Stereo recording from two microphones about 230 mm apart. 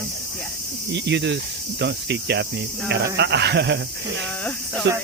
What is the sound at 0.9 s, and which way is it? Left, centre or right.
Cricket, right.